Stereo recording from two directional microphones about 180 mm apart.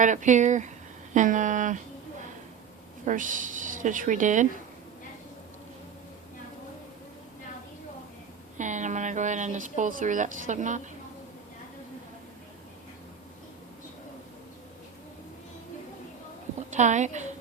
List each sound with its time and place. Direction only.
0.0 s speech: 45° right (ahead or behind)
3.1 s speech: 45° right (ahead or behind)
8.5 s speech: 45° right (ahead or behind)
16.6 s a woman's voice: 40° right (ahead or behind)